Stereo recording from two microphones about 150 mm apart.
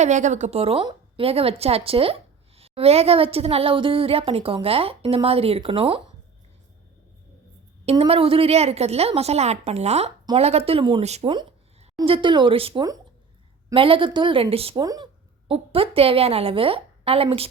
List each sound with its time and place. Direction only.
0.0 s a woman's voice: 55° right (ahead or behind)
7.9 s a woman's voice: 40° right (ahead or behind)
11.0 s a woman's voice: 45° right (ahead or behind)
12.0 s a woman's voice: 35° right (ahead or behind)
14.8 s a woman's voice: 25° right (ahead or behind)